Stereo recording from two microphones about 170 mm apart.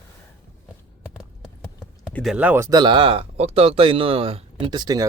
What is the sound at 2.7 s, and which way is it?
Speech, 25° right (ahead or behind).